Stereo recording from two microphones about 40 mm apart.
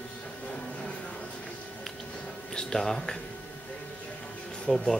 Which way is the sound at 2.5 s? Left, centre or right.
Centre.